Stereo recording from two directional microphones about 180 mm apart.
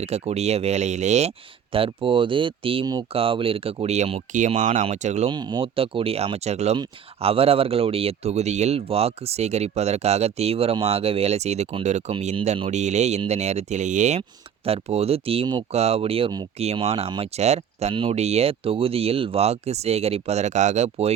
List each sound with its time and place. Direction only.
0.0 s speech: 35° right (ahead or behind)
1.7 s speech: 30° right (ahead or behind)
5.3 s speech: 25° right (ahead or behind)